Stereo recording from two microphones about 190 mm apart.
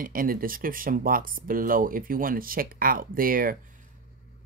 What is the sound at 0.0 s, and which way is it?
Speech, 50° right (ahead or behind).